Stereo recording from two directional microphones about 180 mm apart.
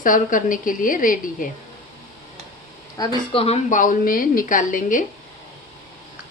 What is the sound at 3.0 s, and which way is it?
A woman's voice, 25° left (ahead or behind).